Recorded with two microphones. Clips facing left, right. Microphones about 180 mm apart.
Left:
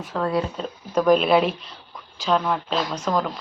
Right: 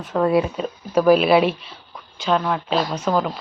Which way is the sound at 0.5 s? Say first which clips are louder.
Right 3 dB; 5° right (ahead or behind).